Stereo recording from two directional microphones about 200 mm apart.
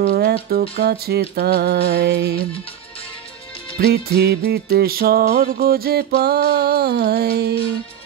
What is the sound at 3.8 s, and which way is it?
Music, 55° right (ahead or behind).